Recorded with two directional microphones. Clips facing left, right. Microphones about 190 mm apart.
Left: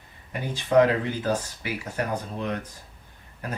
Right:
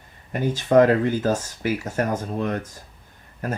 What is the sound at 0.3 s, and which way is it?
Speech, 45° right (ahead or behind).